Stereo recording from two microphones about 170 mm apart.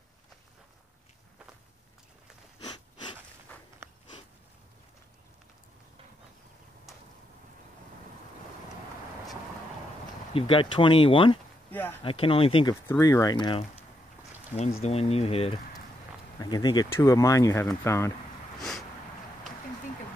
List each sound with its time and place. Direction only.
2.6 s a sound: 25° left (ahead or behind)
3.5 s walk: 10° left (ahead or behind)
10.3 s speech: 30° left (ahead or behind)
11.7 s speech: 10° left (ahead or behind)
12.0 s speech: 30° left (ahead or behind)
12.8 s speech: 15° left (ahead or behind)
14.6 s speech: 40° left (ahead or behind)
16.3 s speech: 25° left (ahead or behind)
18.6 s a sound: centre (ahead or behind)